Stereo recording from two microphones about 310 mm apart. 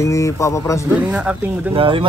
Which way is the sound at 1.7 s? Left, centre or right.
Centre.